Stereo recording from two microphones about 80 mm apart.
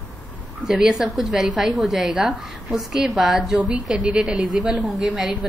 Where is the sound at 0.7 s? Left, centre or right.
Centre.